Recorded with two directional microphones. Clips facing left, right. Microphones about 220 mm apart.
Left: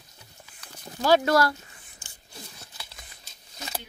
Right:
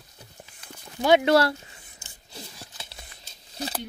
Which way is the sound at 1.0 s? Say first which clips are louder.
Right 2 dB; 20° right (ahead or behind).